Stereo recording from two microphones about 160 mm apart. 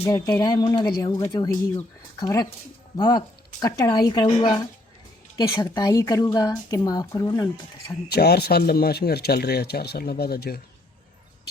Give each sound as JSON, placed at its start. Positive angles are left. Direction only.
{"t": 0.3, "sound": "speech", "side_deg": 25}
{"t": 8.0, "sound": "speech", "side_deg": 80}